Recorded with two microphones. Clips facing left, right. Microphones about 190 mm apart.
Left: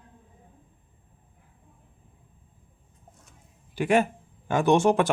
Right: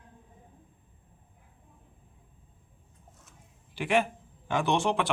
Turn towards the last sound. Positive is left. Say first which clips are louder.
# left 7 dB
turn(degrees=45)  # may be behind; listen again after turning